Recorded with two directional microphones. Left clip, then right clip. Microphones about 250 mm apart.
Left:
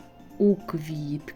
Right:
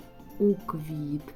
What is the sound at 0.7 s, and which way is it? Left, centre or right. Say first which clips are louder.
Speech: left 1 dB; centre.